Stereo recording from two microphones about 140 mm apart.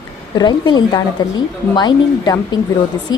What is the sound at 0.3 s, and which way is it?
A woman's voice, 30° left (ahead or behind).